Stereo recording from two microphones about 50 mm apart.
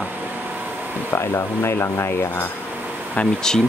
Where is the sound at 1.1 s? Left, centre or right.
Left.